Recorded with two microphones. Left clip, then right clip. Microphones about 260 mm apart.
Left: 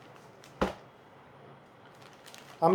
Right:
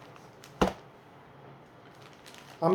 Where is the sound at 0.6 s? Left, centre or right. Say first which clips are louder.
Right 4 dB; right.